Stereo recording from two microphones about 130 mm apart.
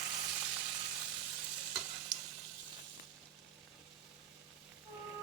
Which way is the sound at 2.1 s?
25° right (ahead or behind).